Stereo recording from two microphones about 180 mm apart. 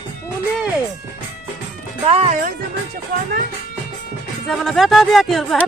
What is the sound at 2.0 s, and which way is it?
Music, 30° right (ahead or behind).